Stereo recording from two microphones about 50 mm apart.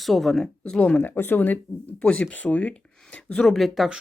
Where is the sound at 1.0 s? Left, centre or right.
Left.